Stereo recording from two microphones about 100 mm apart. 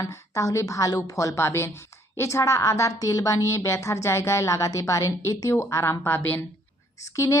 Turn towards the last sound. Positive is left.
turn(degrees=30)  # may be behind; listen again after turning